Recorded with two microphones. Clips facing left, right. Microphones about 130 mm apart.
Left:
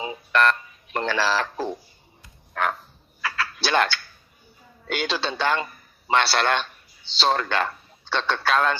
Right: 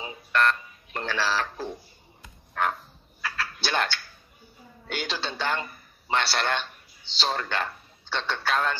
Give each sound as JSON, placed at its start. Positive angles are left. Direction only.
{"t": 0.0, "sound": "a sound", "side_deg": 90}
{"t": 3.2, "sound": "cat", "side_deg": 90}
{"t": 4.8, "sound": "a man's voice", "side_deg": 90}